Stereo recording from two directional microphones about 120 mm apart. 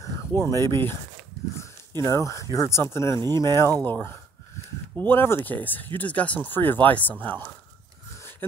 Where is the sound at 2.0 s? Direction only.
25° left (ahead or behind).